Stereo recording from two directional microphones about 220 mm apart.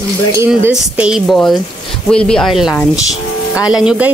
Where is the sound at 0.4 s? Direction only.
5° right (ahead or behind).